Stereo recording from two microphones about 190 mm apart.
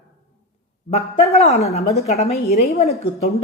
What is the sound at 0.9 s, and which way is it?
A woman's voice, 35° left (ahead or behind).